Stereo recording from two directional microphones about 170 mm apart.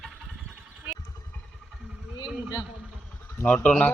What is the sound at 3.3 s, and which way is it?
Speech, 10° left (ahead or behind).